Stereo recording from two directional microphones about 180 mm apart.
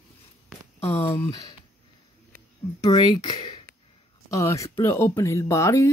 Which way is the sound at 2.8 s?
20° left (ahead or behind).